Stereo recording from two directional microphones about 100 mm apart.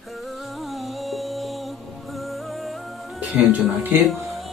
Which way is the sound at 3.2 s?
15° right (ahead or behind).